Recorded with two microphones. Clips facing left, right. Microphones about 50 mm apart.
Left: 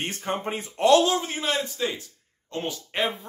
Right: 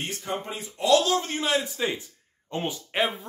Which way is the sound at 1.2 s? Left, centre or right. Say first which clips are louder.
Right 1 dB; centre.